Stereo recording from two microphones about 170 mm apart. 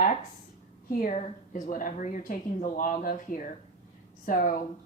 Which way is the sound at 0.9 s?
50° left (ahead or behind).